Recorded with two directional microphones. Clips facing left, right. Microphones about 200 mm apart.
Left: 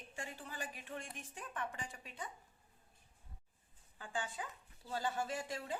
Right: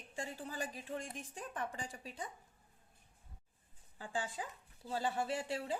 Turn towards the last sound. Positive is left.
turn(degrees=-30)  # may be behind; listen again after turning